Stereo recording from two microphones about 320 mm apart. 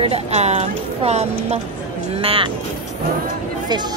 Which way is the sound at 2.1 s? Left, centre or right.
Centre.